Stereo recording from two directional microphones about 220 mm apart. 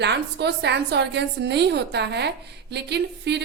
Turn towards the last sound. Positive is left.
turn(degrees=-50)  # may be behind; listen again after turning